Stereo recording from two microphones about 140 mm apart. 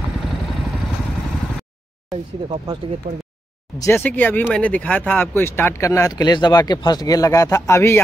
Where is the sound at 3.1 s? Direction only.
60° right (ahead or behind).